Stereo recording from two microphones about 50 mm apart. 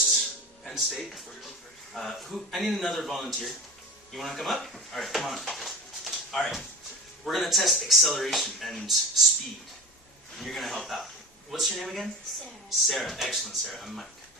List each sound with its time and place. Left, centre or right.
0.0 s a sound: centre
0.7 s speech: centre
10.3 s speech: centre